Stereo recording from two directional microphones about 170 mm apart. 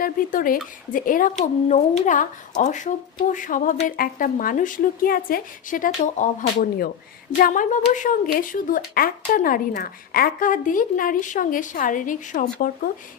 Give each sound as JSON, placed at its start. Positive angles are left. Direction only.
{"t": 0.0, "sound": "a woman's voice", "side_deg": 55}